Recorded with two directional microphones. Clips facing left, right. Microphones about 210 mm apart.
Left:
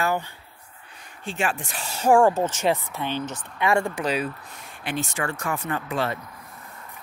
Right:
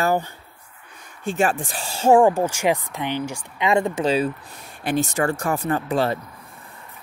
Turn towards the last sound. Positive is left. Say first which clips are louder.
# right 5 dB
turn(degrees=-35)  # may be behind; listen again after turning